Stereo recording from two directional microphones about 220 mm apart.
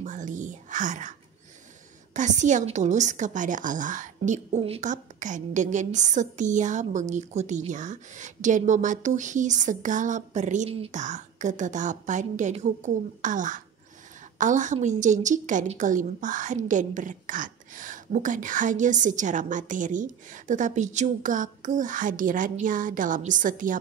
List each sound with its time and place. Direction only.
0.0 s whispering: 35° right (ahead or behind)
2.1 s a woman's voice: 35° right (ahead or behind)